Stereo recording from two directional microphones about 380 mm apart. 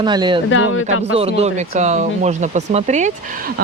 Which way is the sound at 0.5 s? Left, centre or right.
Left.